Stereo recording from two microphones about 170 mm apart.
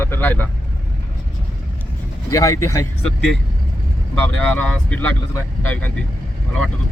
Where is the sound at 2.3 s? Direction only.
20° left (ahead or behind).